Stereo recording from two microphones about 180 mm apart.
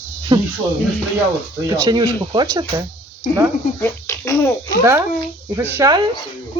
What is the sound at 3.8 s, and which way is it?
Speech, 15° left (ahead or behind).